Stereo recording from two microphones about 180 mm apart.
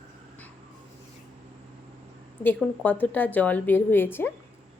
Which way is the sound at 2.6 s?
10° left (ahead or behind).